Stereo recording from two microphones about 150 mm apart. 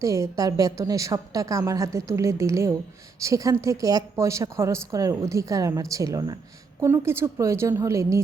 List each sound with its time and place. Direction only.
0.0 s a woman's voice: 20° right (ahead or behind)